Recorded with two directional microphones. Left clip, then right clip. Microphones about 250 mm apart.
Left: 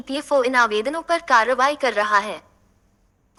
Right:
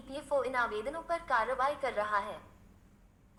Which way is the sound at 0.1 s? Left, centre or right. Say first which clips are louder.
Left 14 dB; left.